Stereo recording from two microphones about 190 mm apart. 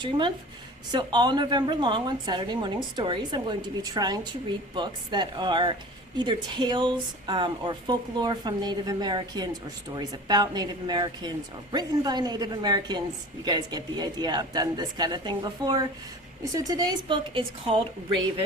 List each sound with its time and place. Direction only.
0.9 s a woman's voice: 20° right (ahead or behind)